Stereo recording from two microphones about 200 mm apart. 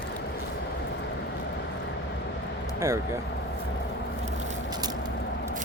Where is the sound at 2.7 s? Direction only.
15° right (ahead or behind).